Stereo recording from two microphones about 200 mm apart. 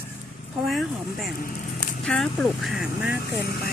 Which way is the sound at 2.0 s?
5° left (ahead or behind).